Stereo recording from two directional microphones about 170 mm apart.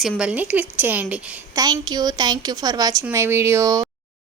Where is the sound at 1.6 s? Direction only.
25° right (ahead or behind).